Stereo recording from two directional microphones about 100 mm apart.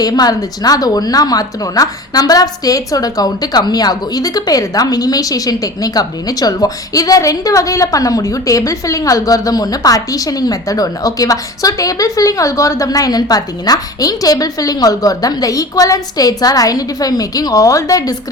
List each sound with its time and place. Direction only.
0.0 s a woman's voice: 40° left (ahead or behind)